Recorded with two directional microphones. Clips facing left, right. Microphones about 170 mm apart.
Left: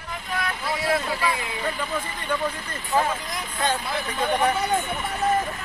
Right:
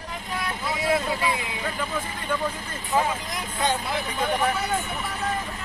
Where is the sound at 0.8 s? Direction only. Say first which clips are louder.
Right 1 dB; 20° right (ahead or behind).